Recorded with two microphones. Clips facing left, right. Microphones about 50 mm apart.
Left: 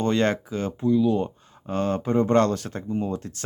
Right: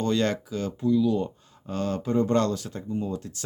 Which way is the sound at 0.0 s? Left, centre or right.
Left.